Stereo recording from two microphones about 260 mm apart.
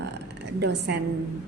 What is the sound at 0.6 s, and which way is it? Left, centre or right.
Speech, right.